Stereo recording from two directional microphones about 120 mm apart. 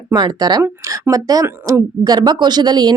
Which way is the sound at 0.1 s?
35° right (ahead or behind).